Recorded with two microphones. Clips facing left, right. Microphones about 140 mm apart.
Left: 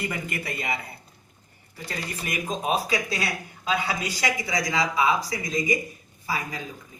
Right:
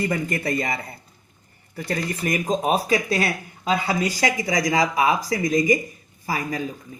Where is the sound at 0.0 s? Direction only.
40° right (ahead or behind).